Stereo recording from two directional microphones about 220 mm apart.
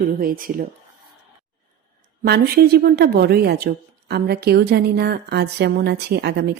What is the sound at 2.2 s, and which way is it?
Speech, 45° right (ahead or behind).